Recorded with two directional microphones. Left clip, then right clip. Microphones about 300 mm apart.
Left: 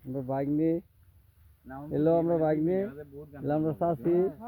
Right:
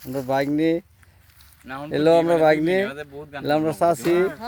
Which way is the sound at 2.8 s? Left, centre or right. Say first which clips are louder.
Right 9 dB; right.